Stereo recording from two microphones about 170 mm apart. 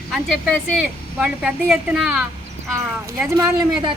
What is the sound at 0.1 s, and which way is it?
A woman's voice, centre (ahead or behind).